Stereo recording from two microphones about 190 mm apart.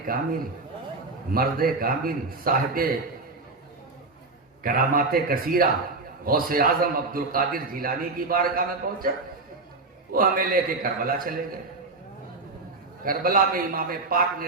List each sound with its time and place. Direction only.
1.3 s a man's voice: 50° right (ahead or behind)
4.6 s a man's voice: 50° right (ahead or behind)
10.1 s a man's voice: 50° right (ahead or behind)
13.1 s a man's voice: 50° right (ahead or behind)